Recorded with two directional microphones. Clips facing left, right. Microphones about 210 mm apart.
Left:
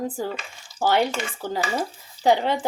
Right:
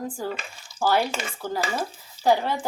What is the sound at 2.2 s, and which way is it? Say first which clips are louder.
Speech: left 2 dB; 20° left (ahead or behind).